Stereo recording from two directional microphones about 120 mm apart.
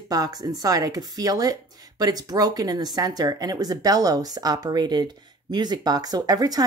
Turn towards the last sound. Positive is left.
turn(degrees=-30)  # may be behind; listen again after turning